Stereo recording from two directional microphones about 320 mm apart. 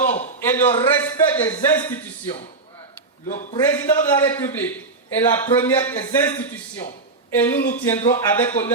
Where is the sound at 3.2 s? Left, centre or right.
Left.